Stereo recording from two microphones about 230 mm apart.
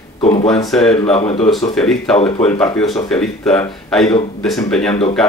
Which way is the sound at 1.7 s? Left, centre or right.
Centre.